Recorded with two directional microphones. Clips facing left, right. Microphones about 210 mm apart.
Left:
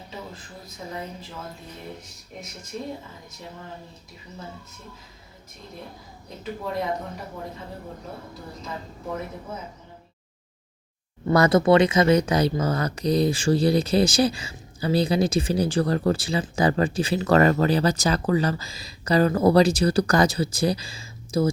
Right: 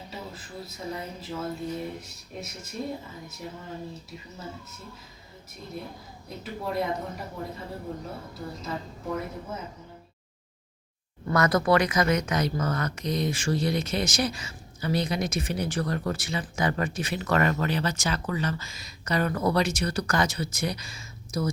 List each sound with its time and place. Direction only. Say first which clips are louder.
11.3 s speech: left 5 dB; 25° left (ahead or behind)